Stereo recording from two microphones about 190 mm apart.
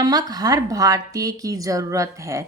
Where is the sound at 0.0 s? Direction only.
20° right (ahead or behind).